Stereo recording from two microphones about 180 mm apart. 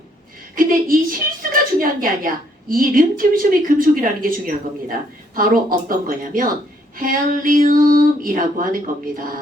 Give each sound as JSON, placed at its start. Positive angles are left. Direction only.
{"t": 0.5, "sound": "a woman's voice", "side_deg": -50}